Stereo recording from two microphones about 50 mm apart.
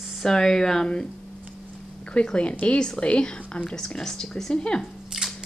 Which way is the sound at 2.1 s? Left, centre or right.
Left.